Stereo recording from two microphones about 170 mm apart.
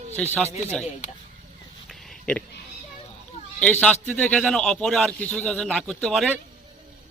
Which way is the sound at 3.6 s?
5° left (ahead or behind).